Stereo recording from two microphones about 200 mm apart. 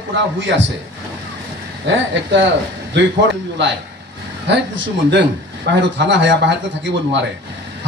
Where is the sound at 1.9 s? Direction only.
65° right (ahead or behind).